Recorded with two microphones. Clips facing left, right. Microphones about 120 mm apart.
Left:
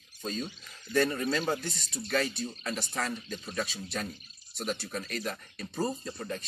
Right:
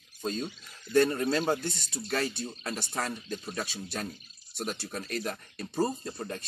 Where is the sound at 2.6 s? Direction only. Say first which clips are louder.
Right 1 dB; 30° right (ahead or behind).